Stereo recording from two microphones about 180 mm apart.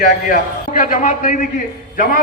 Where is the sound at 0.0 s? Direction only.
50° left (ahead or behind).